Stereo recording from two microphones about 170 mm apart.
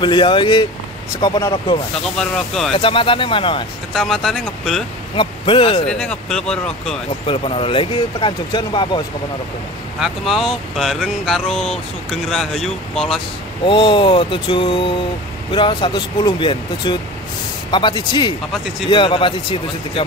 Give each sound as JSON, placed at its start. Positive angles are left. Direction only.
{"t": 0.0, "sound": "speech", "side_deg": 30}
{"t": 2.1, "sound": "speech", "side_deg": 0}
{"t": 2.7, "sound": "a man's voice", "side_deg": 30}
{"t": 3.9, "sound": "speech", "side_deg": 0}
{"t": 5.1, "sound": "speech", "side_deg": 30}
{"t": 5.9, "sound": "speech", "side_deg": 5}
{"t": 7.2, "sound": "speech", "side_deg": 35}
{"t": 9.9, "sound": "speech", "side_deg": 0}
{"t": 13.7, "sound": "a man's voice", "side_deg": 30}